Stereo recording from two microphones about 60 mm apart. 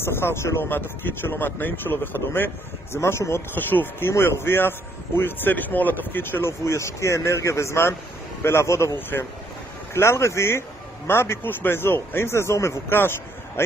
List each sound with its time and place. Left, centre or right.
0.0 s speech: left
3.0 s speech: left
3.5 s speech: left
6.6 s speech: left